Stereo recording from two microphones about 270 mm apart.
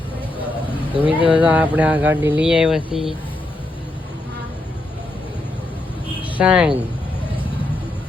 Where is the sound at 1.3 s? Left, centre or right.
Centre.